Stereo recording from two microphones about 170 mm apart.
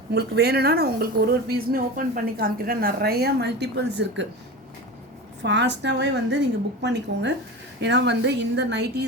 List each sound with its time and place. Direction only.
0.1 s a woman's voice: 70° right (ahead or behind)
5.4 s a woman's voice: 90° right